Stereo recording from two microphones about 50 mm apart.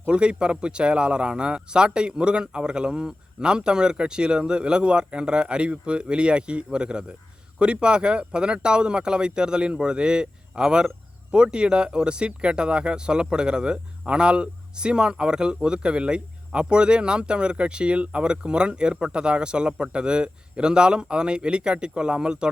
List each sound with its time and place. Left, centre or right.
0.1 s speech: right